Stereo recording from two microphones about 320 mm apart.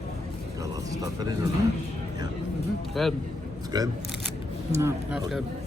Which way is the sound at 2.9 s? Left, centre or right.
Centre.